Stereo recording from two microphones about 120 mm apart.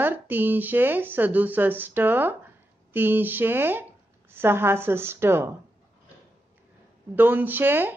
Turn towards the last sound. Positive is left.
turn(degrees=-15)  # may be behind; listen again after turning